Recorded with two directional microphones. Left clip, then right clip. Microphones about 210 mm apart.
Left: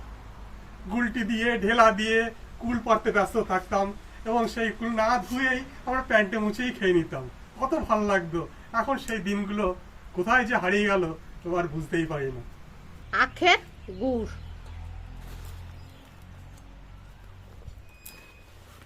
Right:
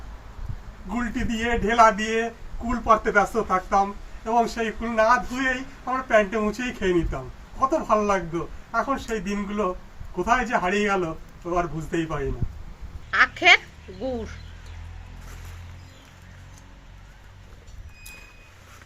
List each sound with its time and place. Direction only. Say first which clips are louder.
0.9 s a man's voice: even; centre (ahead or behind)
13.1 s speech: right 5 dB; 50° left (ahead or behind)